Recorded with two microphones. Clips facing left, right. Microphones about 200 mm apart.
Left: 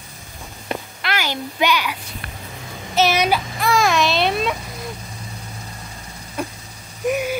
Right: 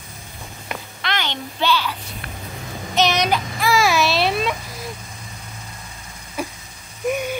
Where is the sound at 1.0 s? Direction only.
10° left (ahead or behind).